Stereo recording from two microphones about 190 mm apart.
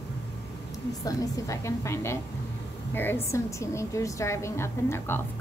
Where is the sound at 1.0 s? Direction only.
15° left (ahead or behind).